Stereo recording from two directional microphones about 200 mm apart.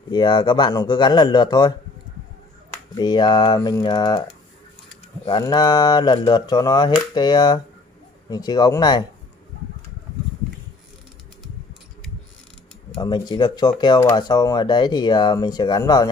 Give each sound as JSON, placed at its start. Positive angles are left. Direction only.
{"t": 0.1, "sound": "speech", "side_deg": 25}
{"t": 2.9, "sound": "speech", "side_deg": 20}
{"t": 12.9, "sound": "speech", "side_deg": 20}